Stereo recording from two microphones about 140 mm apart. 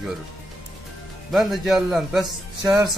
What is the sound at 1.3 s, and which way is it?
Speech, centre (ahead or behind).